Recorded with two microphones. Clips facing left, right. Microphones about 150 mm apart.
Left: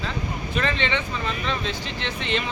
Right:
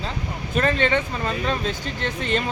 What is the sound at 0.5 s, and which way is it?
Speech, 45° right (ahead or behind).